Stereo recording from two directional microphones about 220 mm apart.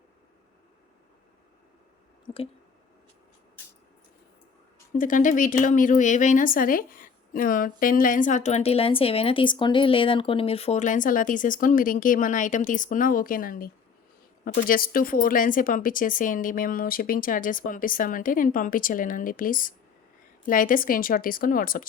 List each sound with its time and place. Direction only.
2.2 s squish: 25° left (ahead or behind)
4.9 s speech: 35° left (ahead or behind)